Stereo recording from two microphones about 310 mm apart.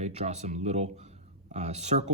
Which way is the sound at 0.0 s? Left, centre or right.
Right.